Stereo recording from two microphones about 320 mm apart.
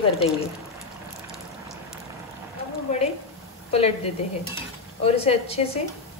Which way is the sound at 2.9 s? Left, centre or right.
Left.